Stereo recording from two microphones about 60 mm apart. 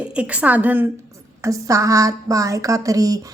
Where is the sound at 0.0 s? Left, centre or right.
Right.